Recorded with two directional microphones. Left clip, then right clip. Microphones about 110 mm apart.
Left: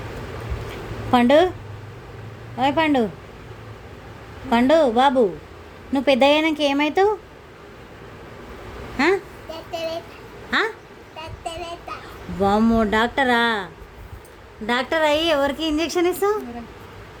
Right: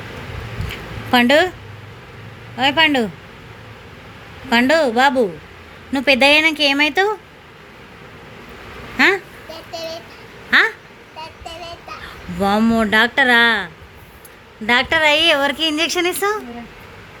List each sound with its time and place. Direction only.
1.1 s a woman's voice: 20° left (ahead or behind)
2.6 s a woman's voice: 20° left (ahead or behind)
4.4 s a woman's voice: 20° left (ahead or behind)
9.0 s a sound: 10° left (ahead or behind)
9.7 s child singing: 20° left (ahead or behind)
10.5 s speech: 5° left (ahead or behind)
11.2 s child singing: 15° left (ahead or behind)
12.4 s a woman's voice: 10° left (ahead or behind)
14.7 s a woman's voice: centre (ahead or behind)